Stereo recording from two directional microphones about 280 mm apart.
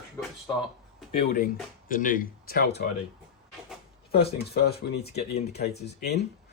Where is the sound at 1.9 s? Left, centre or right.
Left.